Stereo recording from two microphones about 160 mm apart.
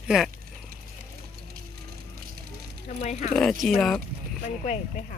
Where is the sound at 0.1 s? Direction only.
5° right (ahead or behind).